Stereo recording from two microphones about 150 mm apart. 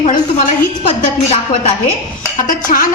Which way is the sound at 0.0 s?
60° left (ahead or behind).